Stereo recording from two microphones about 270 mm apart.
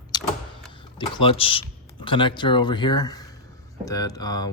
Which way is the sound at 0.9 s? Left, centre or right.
Centre.